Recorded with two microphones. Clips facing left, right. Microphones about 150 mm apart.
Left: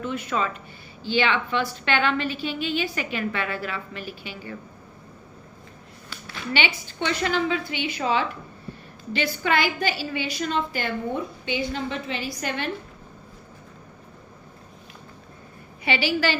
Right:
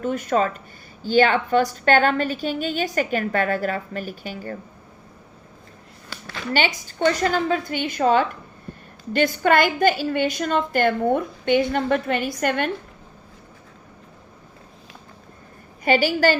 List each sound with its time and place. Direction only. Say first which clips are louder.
0.0 s a woman's voice: right 6 dB; 45° right (ahead or behind)
6.5 s a woman's voice: right 4 dB; 40° right (ahead or behind)
15.8 s a woman's voice: right 6 dB; 45° right (ahead or behind)